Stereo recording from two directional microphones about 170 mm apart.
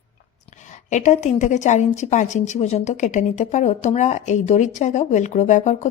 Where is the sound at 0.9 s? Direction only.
45° left (ahead or behind).